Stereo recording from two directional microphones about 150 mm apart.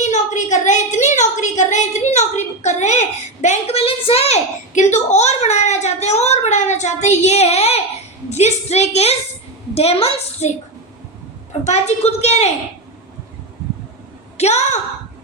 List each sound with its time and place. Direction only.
0.0 s a sound: 55° left (ahead or behind)
8.3 s a woman's voice: 50° left (ahead or behind)
11.6 s a woman's voice: 45° left (ahead or behind)
14.3 s a woman's voice: 45° left (ahead or behind)